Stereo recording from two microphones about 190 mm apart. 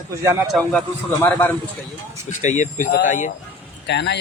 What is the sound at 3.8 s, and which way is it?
Speech, 65° left (ahead or behind).